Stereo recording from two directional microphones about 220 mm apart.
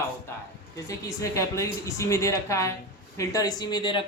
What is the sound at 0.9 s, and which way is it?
A woman's voice, 15° left (ahead or behind).